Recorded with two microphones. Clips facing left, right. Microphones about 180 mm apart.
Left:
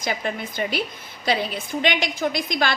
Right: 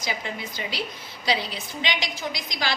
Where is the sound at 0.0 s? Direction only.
55° left (ahead or behind).